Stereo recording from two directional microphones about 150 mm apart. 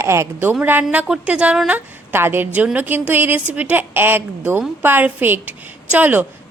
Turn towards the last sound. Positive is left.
turn(degrees=-10)  # may be behind; listen again after turning